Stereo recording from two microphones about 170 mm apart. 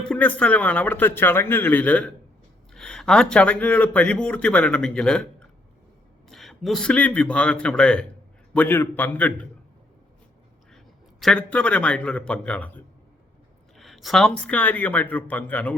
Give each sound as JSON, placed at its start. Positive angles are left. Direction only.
{"t": 0.1, "sound": "a man's voice", "side_deg": 10}
{"t": 11.2, "sound": "speech", "side_deg": 5}